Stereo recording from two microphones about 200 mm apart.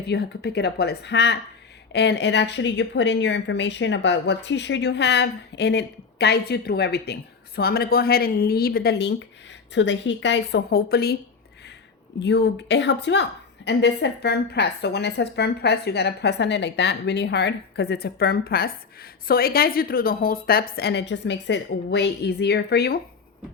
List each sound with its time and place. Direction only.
0.0 s speech: 55° left (ahead or behind)
12.2 s speech: 55° left (ahead or behind)